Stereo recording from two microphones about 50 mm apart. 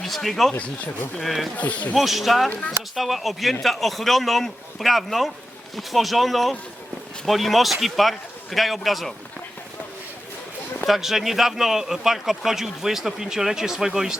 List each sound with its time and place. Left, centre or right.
0.0 s speech: centre
1.5 s speech: left
2.0 s speech: centre
10.8 s speech: centre